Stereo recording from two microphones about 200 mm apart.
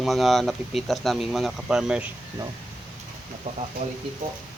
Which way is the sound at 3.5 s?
30° right (ahead or behind).